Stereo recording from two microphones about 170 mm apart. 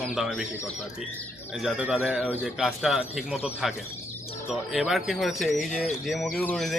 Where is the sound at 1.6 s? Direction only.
Centre (ahead or behind).